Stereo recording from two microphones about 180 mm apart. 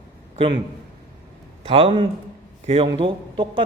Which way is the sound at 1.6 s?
30° right (ahead or behind).